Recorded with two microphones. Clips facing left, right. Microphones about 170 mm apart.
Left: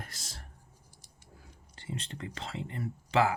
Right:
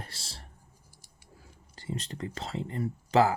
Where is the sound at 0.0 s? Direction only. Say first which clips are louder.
Right 1 dB; 30° right (ahead or behind).